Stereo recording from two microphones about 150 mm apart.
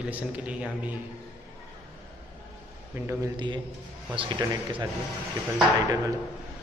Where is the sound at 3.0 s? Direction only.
15° right (ahead or behind).